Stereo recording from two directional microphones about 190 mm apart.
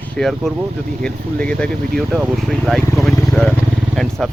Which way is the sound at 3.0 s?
Centre (ahead or behind).